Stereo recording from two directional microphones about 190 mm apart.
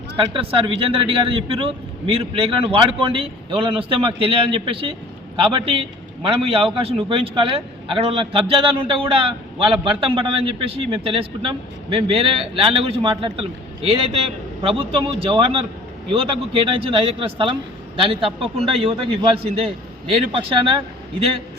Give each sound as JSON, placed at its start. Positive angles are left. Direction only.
{"t": 0.3, "sound": "a man's voice", "side_deg": -30}